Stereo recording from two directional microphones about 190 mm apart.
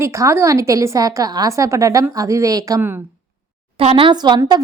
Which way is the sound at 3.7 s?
30° right (ahead or behind).